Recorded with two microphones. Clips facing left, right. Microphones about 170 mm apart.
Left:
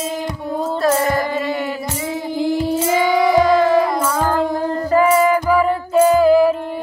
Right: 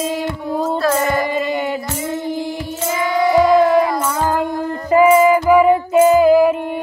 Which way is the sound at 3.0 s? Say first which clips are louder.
Right 1 dB; 90° left.